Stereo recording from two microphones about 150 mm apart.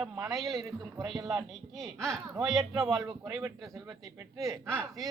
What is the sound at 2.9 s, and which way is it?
Speech, 25° right (ahead or behind).